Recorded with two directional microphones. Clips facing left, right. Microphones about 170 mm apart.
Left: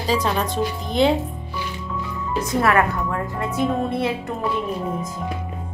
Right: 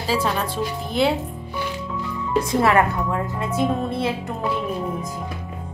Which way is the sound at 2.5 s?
25° right (ahead or behind).